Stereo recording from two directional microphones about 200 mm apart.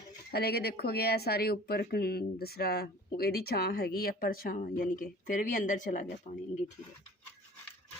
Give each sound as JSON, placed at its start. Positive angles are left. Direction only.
{"t": 0.3, "sound": "speech", "side_deg": 50}